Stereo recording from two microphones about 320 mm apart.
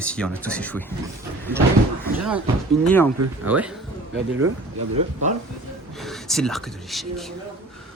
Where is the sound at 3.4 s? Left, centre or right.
Centre.